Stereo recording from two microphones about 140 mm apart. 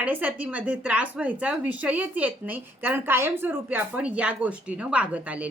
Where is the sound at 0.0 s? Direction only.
10° right (ahead or behind).